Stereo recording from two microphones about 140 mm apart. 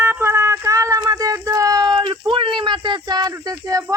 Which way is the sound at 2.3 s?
35° right (ahead or behind).